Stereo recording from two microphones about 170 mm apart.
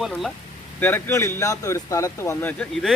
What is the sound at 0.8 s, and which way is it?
Speech, 15° left (ahead or behind).